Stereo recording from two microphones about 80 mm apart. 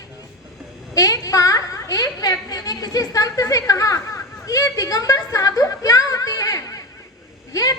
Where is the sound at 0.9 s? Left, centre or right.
Left.